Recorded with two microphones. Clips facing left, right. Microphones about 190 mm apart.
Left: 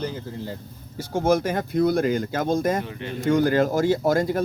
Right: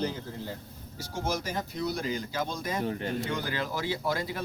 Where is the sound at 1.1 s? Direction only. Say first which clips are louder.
Left 11 dB; 55° left (ahead or behind).